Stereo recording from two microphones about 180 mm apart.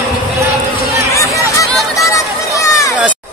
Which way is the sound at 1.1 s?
20° left (ahead or behind).